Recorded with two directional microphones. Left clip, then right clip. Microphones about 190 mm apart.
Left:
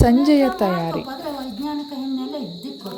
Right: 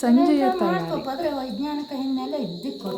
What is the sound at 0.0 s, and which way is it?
Speech, 20° left (ahead or behind).